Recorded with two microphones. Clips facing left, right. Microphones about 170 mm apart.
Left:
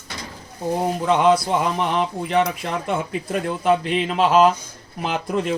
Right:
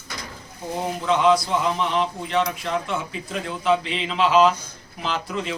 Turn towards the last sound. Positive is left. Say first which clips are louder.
# left 5 dB
turn(degrees=50)  # may be behind; listen again after turning